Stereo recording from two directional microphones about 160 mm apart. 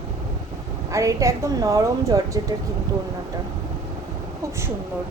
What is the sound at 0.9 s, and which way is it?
A woman's voice, 20° right (ahead or behind).